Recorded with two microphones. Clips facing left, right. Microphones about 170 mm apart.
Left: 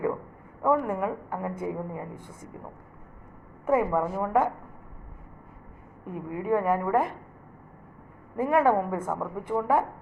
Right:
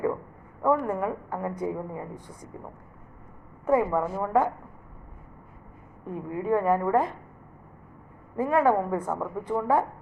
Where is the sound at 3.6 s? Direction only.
20° left (ahead or behind).